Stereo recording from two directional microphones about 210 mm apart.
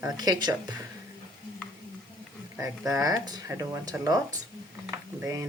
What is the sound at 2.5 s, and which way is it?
Speech, 15° right (ahead or behind).